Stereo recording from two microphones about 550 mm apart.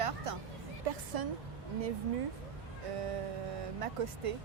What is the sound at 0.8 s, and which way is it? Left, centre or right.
Speech, right.